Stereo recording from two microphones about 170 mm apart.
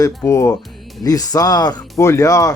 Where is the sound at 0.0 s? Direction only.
15° left (ahead or behind).